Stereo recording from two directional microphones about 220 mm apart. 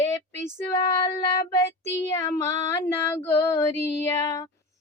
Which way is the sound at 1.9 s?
15° left (ahead or behind).